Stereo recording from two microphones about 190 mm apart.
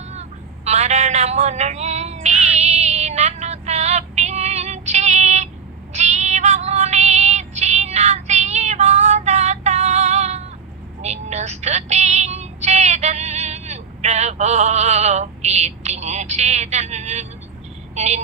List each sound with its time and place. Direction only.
0.1 s a sound: 35° right (ahead or behind)
5.9 s female singing: 35° right (ahead or behind)
17.9 s a woman's voice: 35° right (ahead or behind)